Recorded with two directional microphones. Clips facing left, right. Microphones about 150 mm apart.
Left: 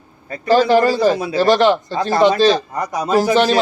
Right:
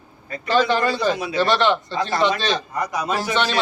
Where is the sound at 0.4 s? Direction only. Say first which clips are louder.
Left 6 dB; 35° left (ahead or behind).